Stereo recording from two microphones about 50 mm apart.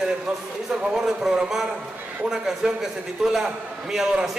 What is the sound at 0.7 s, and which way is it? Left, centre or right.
Speech, right.